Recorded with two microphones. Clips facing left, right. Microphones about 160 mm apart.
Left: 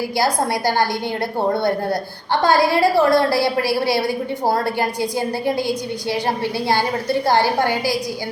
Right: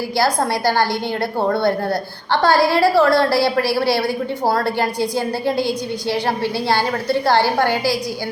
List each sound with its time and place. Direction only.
0.2 s a woman's voice: 20° left (ahead or behind)